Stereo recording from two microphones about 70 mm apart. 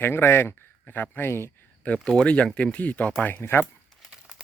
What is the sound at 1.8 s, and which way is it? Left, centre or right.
Speech, left.